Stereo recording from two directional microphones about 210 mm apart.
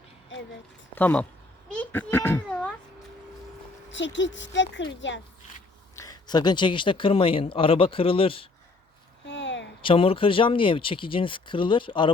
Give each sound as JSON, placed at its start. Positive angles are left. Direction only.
{"t": 0.9, "sound": "speech", "side_deg": 5}
{"t": 1.7, "sound": "a sound", "side_deg": 10}
{"t": 3.9, "sound": "a woman's voice", "side_deg": 60}
{"t": 6.0, "sound": "speech", "side_deg": 20}
{"t": 9.2, "sound": "a sound", "side_deg": 60}
{"t": 9.8, "sound": "speech", "side_deg": 25}